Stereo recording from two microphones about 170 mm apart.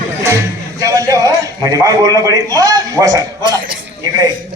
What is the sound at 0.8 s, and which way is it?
A man's voice, 20° right (ahead or behind).